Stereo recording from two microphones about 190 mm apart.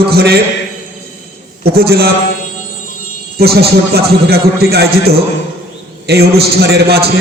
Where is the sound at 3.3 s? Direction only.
55° right (ahead or behind).